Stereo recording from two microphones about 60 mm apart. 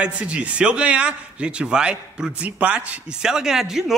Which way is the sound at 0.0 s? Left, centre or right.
Centre.